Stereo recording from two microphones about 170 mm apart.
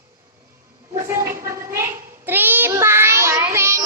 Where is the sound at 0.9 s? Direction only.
15° right (ahead or behind).